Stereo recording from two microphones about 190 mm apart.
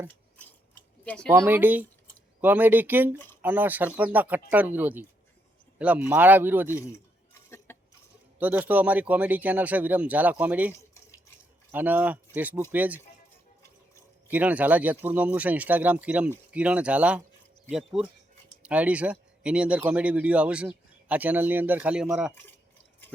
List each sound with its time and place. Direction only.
0.1 s scissors: 10° left (ahead or behind)
1.0 s speech: 5° left (ahead or behind)
1.3 s speech: 10° right (ahead or behind)
6.9 s a sound: 15° left (ahead or behind)
8.4 s speech: 10° right (ahead or behind)
10.8 s drip: 15° left (ahead or behind)
11.7 s speech: 10° right (ahead or behind)
14.3 s speech: 10° right (ahead or behind)